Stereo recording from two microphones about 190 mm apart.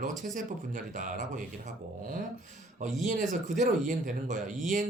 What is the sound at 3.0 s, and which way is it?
Speech, 40° right (ahead or behind).